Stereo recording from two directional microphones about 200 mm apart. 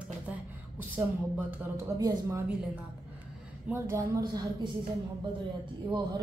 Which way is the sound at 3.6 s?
15° right (ahead or behind).